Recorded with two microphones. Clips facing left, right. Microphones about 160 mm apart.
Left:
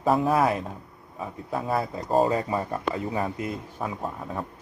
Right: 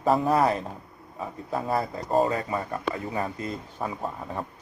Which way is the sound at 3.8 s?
Centre (ahead or behind).